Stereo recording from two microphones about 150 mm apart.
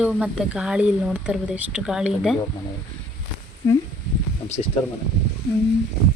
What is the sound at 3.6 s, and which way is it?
Speech, 20° left (ahead or behind).